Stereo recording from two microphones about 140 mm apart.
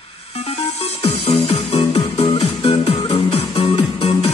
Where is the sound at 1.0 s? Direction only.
45° left (ahead or behind).